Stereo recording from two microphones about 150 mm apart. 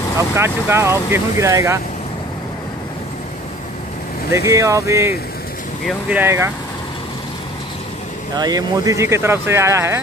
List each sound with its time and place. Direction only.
0.4 s speech: 15° right (ahead or behind)
4.3 s speech: 20° right (ahead or behind)
5.9 s speech: 10° right (ahead or behind)
8.4 s speech: 25° right (ahead or behind)